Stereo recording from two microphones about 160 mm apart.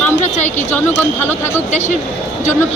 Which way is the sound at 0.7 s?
15° left (ahead or behind).